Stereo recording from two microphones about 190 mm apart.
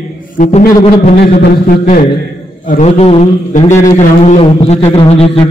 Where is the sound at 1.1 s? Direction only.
55° left (ahead or behind).